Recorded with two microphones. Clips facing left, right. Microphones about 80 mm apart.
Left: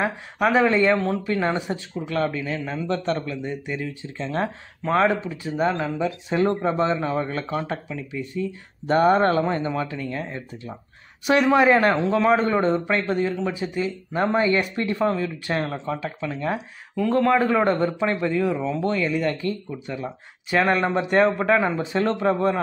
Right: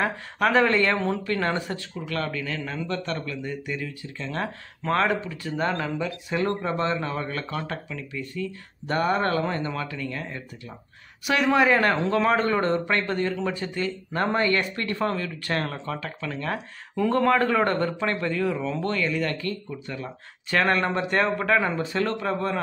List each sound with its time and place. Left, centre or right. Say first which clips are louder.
0.0 s speech: left 2 dB; centre
0.9 s speech: left 3 dB; centre
1.2 s speech: left 2 dB; centre
12.1 s speech: left 3 dB; centre
12.4 s speech: left 2 dB; left
12.6 s speech: left 2 dB; centre
16.9 s speech: left 2 dB; centre; by 22.5 s left